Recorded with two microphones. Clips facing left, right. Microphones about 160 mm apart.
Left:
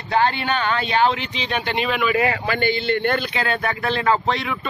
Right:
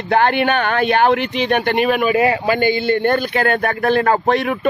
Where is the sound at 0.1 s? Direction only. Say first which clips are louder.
Right 5 dB; 60° right (ahead or behind).